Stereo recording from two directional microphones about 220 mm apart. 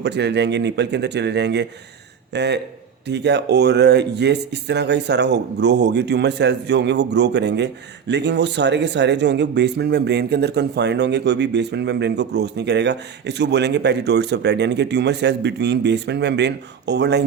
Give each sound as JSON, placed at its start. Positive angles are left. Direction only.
{"t": 0.0, "sound": "speech", "side_deg": -50}